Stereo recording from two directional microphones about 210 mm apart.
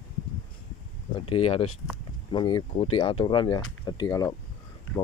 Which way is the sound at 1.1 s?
25° left (ahead or behind).